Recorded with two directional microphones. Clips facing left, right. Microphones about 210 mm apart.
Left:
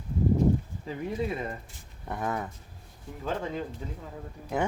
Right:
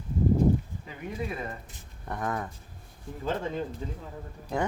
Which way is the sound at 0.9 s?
25° left (ahead or behind).